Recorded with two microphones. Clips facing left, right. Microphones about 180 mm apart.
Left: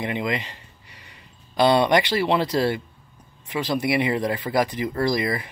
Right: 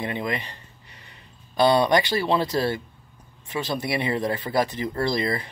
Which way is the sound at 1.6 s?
20° left (ahead or behind).